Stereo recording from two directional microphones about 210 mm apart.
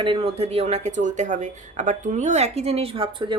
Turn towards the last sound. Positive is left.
turn(degrees=-25)  # may be behind; listen again after turning